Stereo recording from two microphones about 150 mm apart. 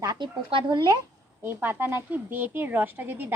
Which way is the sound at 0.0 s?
30° right (ahead or behind).